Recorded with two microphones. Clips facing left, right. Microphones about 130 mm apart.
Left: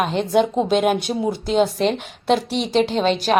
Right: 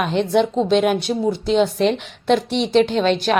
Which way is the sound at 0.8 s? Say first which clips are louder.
Right 1 dB; 50° left (ahead or behind).